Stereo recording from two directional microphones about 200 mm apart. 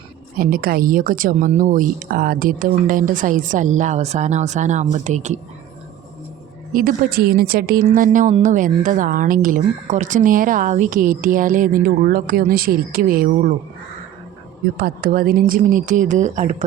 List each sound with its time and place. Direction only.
0.3 s a woman's voice: 45° right (ahead or behind)
6.7 s speech: 45° right (ahead or behind)
14.8 s speech: 50° right (ahead or behind)